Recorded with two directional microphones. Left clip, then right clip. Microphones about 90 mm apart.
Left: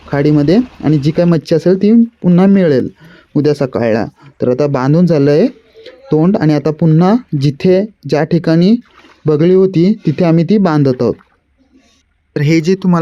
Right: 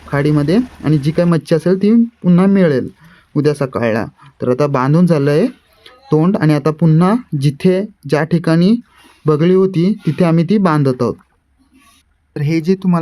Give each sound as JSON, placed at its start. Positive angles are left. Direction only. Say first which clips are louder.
{"t": 0.1, "sound": "speech", "louder": "left 4 dB", "side_deg": 35}
{"t": 12.3, "sound": "speech", "louder": "left 4 dB", "side_deg": 40}